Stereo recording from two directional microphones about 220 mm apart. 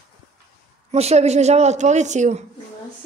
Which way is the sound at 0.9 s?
30° right (ahead or behind).